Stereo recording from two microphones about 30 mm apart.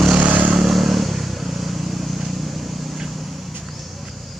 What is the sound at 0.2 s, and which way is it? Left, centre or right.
Vehicle, right.